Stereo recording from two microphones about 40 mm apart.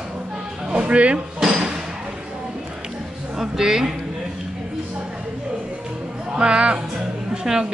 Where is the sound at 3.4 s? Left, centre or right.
Centre.